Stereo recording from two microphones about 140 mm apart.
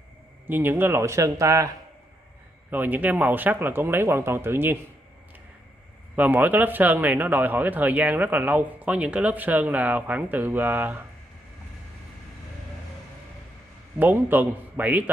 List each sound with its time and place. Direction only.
0.5 s speech: 15° right (ahead or behind)
2.7 s speech: 15° right (ahead or behind)
6.1 s speech: 10° right (ahead or behind)
13.9 s speech: 15° right (ahead or behind)